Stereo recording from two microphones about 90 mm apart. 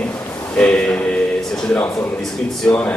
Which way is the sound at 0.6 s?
15° left (ahead or behind).